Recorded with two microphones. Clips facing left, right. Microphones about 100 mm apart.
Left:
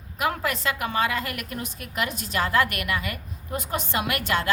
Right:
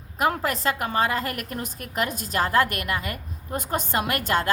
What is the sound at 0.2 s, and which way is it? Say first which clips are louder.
A woman's voice: right 2 dB; 40° right (ahead or behind).